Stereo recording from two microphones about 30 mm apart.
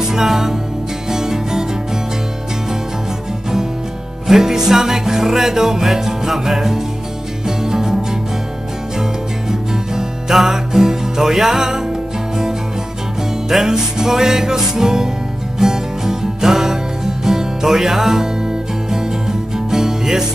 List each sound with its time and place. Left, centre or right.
0.1 s music: centre
4.3 s music: centre
9.5 s music: centre
13.5 s music: centre